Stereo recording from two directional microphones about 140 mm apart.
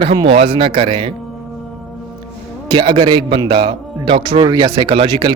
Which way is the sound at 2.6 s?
35° right (ahead or behind).